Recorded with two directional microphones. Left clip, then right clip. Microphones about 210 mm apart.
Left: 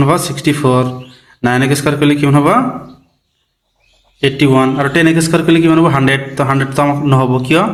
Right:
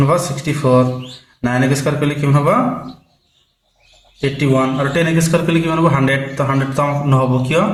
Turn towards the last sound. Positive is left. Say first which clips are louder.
# left 4 dB
turn(degrees=40)  # may be behind; listen again after turning